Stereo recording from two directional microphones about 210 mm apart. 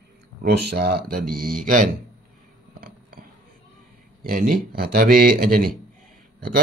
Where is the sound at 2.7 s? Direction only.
45° right (ahead or behind).